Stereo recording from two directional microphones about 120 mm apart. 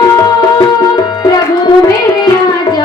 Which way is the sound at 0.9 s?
35° left (ahead or behind).